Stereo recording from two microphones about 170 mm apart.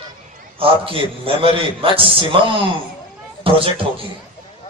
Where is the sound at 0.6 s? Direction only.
30° right (ahead or behind).